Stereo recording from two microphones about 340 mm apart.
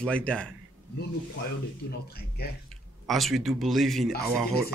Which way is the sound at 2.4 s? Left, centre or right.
Left.